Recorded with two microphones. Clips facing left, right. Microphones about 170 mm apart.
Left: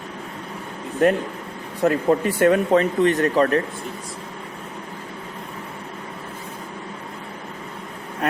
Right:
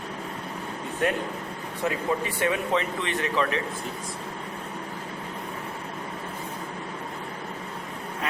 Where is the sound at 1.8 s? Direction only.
50° left (ahead or behind).